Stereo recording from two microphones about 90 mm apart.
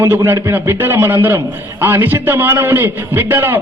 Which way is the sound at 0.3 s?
30° right (ahead or behind).